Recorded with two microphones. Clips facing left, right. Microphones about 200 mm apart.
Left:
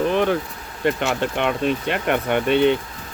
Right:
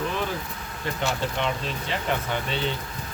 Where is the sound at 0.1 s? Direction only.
60° left (ahead or behind).